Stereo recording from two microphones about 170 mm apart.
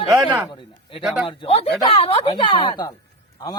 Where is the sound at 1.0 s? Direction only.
Centre (ahead or behind).